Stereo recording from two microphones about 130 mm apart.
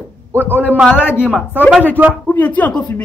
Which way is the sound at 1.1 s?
5° right (ahead or behind).